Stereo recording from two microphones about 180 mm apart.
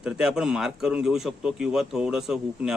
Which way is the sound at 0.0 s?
5° right (ahead or behind).